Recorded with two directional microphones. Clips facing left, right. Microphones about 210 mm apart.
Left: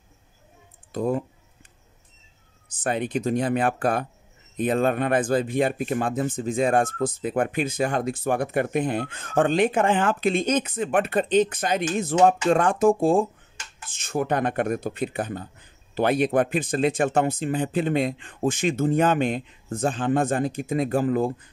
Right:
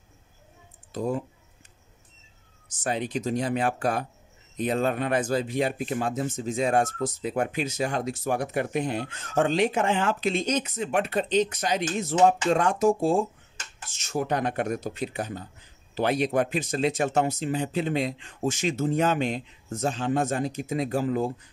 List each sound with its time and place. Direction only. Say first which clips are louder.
0.9 s speech: left 3 dB; 55° left (ahead or behind)
2.7 s speech: left 3 dB; 55° left (ahead or behind)